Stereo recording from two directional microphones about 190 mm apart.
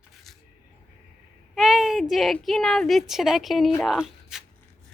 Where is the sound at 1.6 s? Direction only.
Centre (ahead or behind).